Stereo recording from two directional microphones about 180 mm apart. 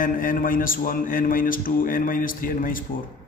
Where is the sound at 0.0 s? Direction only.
50° left (ahead or behind).